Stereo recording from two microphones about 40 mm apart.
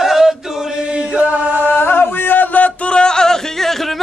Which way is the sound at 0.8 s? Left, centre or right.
Right.